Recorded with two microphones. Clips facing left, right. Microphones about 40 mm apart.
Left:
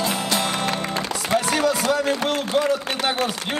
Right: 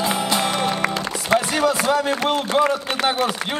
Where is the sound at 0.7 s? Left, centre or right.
Right.